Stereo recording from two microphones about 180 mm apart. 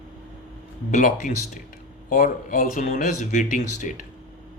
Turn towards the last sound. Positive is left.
turn(degrees=45)  # may be behind; listen again after turning